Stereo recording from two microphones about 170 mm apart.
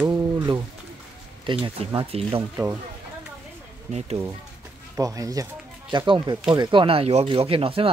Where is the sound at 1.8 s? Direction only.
35° right (ahead or behind).